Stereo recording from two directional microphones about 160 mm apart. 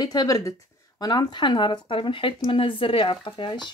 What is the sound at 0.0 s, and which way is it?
Speech, 25° left (ahead or behind).